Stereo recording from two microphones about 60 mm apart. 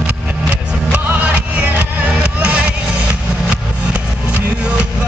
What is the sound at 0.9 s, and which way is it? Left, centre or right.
Music, right.